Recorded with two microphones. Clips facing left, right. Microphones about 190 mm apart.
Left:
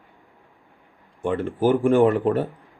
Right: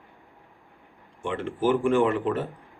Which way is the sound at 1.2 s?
45° left (ahead or behind).